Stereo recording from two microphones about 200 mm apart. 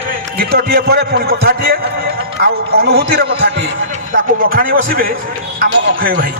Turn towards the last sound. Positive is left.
turn(degrees=-45)  # may be behind; listen again after turning